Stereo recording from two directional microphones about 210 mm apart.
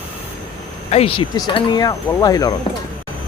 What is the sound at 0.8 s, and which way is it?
Speech, 30° left (ahead or behind).